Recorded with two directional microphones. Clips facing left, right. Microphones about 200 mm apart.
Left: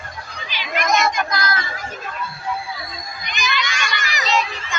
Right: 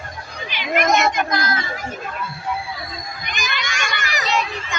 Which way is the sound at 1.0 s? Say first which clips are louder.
Right 1 dB; 60° right (ahead or behind).